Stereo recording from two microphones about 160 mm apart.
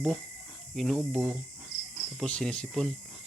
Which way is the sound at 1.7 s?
45° left (ahead or behind).